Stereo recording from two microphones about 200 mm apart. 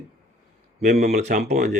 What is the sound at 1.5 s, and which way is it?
Speech, 35° right (ahead or behind).